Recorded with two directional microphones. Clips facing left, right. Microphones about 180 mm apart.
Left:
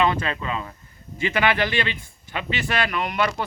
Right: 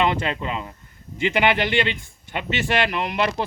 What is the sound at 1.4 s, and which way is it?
Speech, 20° right (ahead or behind).